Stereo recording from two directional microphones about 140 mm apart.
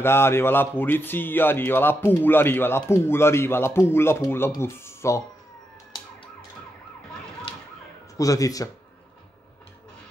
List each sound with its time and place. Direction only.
0.0 s speech: 15° left (ahead or behind)
8.2 s speech: 25° left (ahead or behind)